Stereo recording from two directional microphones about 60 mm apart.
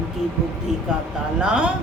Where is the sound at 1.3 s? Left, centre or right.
Centre.